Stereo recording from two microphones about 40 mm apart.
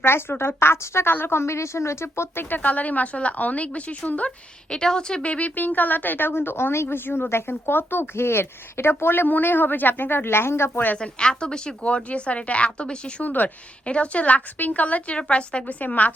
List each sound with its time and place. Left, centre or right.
0.0 s a woman's voice: left
1.1 s a woman's voice: left
2.6 s a woman's voice: left
4.7 s a woman's voice: centre
5.2 s a woman's voice: left
5.5 s a woman's voice: left
10.9 s a woman's voice: left
13.2 s a woman's voice: left
13.8 s a woman's voice: left
15.8 s a woman's voice: left